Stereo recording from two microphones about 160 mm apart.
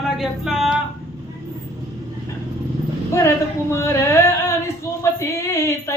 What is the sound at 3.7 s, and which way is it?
Music, 15° left (ahead or behind).